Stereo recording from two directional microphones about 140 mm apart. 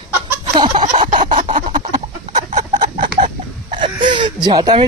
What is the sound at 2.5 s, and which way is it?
Chicken, 60° right (ahead or behind).